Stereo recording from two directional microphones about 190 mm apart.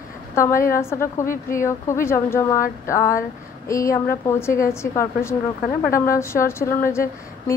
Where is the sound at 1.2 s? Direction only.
45° left (ahead or behind).